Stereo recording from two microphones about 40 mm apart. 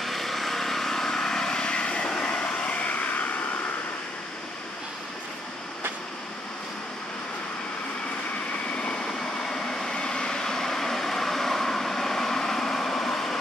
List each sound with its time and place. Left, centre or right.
0.0 s vehicle: centre; by 3.3 s left
9.5 s vehicle: centre